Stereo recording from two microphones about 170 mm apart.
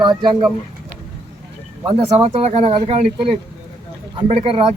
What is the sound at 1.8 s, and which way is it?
Speech, 35° right (ahead or behind).